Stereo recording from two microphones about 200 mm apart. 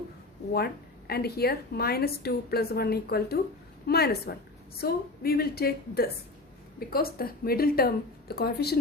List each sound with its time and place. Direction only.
0.5 s a woman's voice: 50° left (ahead or behind)